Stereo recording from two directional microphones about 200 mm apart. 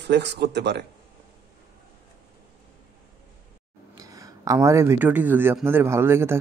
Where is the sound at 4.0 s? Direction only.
15° right (ahead or behind).